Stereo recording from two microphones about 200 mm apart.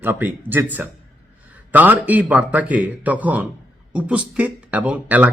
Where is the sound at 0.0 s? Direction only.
10° right (ahead or behind).